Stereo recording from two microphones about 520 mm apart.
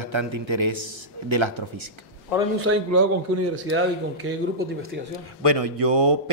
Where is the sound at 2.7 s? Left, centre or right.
Right.